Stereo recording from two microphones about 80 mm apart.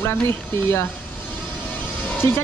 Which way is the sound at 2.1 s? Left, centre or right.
Left.